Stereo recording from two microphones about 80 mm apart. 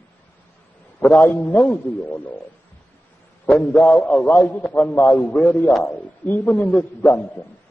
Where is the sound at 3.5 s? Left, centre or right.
Centre.